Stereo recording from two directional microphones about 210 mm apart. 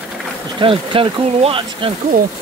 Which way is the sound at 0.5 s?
25° right (ahead or behind).